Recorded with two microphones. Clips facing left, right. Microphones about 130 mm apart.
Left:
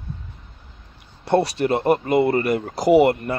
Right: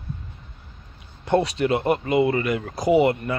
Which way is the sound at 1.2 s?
35° left (ahead or behind).